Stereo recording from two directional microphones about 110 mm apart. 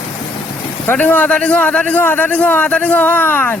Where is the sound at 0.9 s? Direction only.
15° left (ahead or behind).